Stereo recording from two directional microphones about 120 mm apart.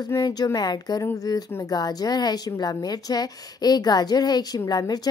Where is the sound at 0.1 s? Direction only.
35° left (ahead or behind).